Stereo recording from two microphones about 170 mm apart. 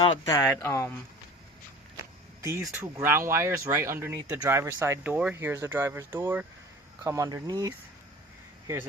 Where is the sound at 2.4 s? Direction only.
15° right (ahead or behind).